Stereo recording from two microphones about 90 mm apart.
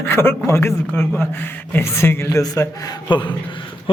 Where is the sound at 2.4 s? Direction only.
40° left (ahead or behind).